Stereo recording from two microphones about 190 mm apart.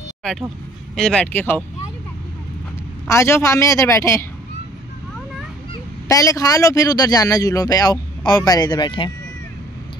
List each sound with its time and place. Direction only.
0.2 s speech: centre (ahead or behind)
3.1 s speech: 15° left (ahead or behind)
6.0 s speech: 20° left (ahead or behind)